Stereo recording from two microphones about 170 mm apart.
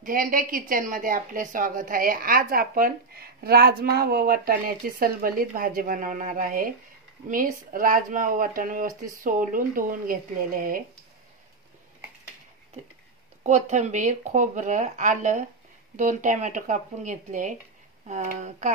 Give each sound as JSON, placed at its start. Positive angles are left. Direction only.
{"t": 0.0, "sound": "a woman's voice", "side_deg": -55}
{"t": 13.4, "sound": "speech", "side_deg": -45}